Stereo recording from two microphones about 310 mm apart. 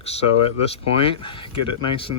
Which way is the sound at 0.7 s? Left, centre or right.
Centre.